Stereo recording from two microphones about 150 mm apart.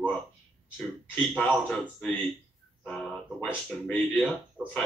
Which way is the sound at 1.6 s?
10° left (ahead or behind).